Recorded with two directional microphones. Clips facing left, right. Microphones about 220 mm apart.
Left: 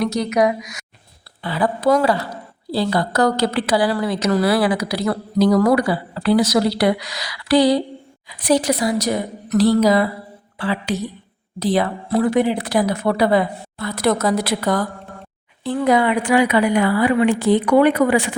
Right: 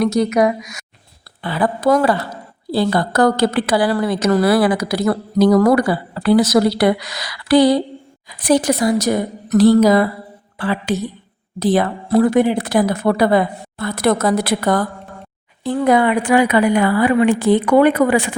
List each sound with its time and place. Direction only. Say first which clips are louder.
0.0 s a woman's voice: right 3 dB; 50° right (ahead or behind)